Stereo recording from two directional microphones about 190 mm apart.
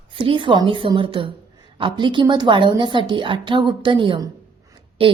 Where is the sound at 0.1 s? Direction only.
30° right (ahead or behind).